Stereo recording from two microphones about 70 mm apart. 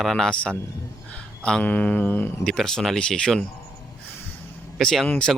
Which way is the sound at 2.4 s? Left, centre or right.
Centre.